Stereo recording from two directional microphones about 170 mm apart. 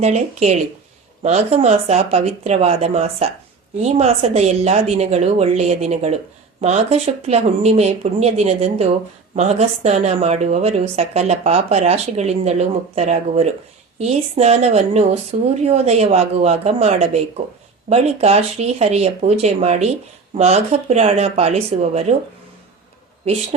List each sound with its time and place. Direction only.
0.0 s a woman's voice: 40° right (ahead or behind)
23.2 s a woman's voice: 40° right (ahead or behind)